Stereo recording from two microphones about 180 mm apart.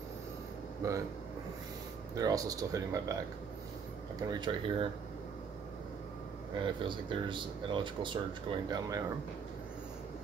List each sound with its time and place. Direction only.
0.8 s speech: 15° right (ahead or behind)
2.1 s speech: 20° right (ahead or behind)
4.2 s speech: 25° right (ahead or behind)
6.6 s speech: 25° right (ahead or behind)